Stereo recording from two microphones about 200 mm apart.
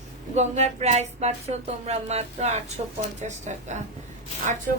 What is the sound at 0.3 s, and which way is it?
Speech, 35° right (ahead or behind).